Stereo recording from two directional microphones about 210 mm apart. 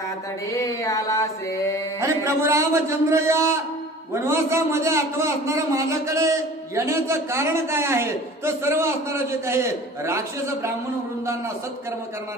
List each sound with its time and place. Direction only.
0.5 s mantra: 15° left (ahead or behind)
2.0 s a man's voice: 15° right (ahead or behind)